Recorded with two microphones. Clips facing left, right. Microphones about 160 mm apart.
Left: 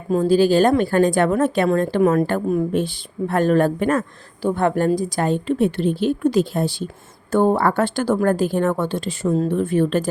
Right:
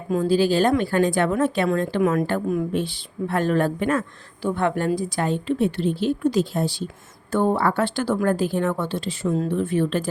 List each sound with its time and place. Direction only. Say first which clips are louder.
0.1 s a woman's voice: left 4 dB; 45° left (ahead or behind)